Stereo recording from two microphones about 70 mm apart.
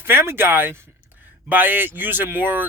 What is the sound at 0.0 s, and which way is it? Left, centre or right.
Speech, right.